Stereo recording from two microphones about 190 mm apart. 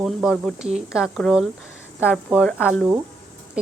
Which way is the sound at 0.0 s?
Centre (ahead or behind).